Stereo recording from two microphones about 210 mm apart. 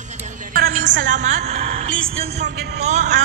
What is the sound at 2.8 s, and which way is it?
Speech, 35° right (ahead or behind).